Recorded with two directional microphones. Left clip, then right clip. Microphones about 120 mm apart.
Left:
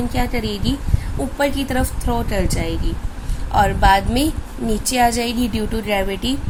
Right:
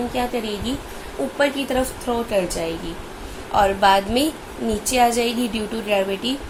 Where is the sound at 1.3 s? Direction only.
50° left (ahead or behind).